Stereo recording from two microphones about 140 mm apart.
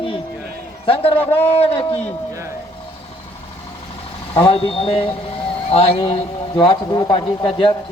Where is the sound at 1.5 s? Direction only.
45° left (ahead or behind).